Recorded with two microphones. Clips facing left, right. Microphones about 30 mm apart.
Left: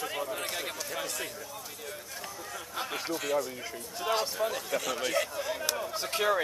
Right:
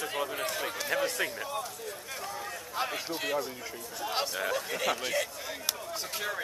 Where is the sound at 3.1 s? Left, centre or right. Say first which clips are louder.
Left 2 dB; right.